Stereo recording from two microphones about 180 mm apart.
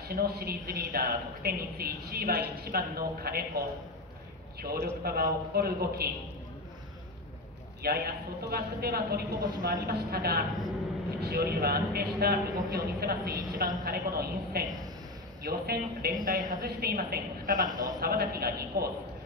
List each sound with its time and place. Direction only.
0.0 s a man's voice: 60° right (ahead or behind)
7.8 s a man's voice: 60° right (ahead or behind)
17.6 s a man's voice: 20° right (ahead or behind)
18.0 s a man's voice: 55° right (ahead or behind)